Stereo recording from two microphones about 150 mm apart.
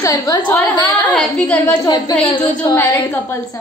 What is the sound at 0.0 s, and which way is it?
Speech, 20° left (ahead or behind).